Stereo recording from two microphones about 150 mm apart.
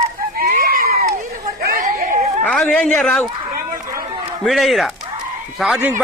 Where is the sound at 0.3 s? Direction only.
75° right (ahead or behind).